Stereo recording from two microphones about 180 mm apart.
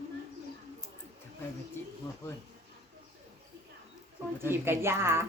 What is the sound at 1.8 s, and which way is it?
Speech, 15° left (ahead or behind).